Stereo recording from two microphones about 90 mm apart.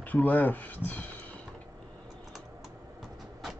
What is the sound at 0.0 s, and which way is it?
Speech, 20° left (ahead or behind).